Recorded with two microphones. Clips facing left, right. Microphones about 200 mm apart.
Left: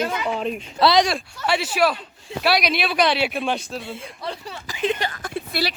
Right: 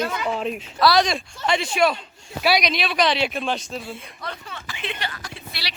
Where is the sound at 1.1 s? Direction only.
5° left (ahead or behind).